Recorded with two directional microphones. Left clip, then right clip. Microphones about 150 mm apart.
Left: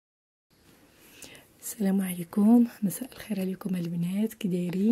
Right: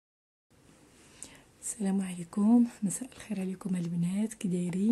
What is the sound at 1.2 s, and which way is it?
Speech, 25° left (ahead or behind).